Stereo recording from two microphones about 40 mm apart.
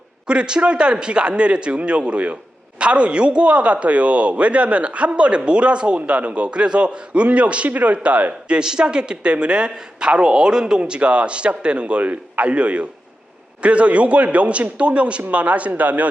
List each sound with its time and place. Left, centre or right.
0.3 s a man's voice: right
8.5 s a man's voice: centre; by 16.0 s right